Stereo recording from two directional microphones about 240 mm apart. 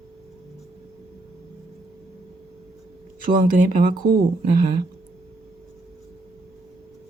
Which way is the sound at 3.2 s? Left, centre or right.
Right.